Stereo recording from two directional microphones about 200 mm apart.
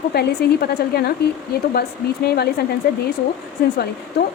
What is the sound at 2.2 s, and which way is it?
Speech, 50° left (ahead or behind).